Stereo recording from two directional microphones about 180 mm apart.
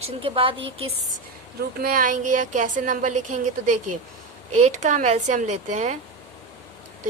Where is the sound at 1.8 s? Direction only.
50° right (ahead or behind).